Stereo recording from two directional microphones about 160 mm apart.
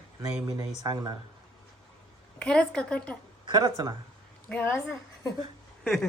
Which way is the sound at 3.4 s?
25° right (ahead or behind).